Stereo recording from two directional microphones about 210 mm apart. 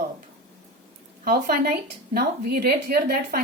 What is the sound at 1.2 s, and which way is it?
Speech, 45° right (ahead or behind).